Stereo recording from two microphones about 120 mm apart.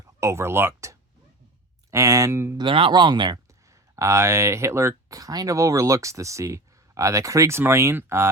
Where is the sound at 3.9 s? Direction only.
25° right (ahead or behind).